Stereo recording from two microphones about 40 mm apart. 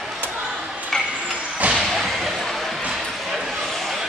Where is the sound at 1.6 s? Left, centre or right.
Right.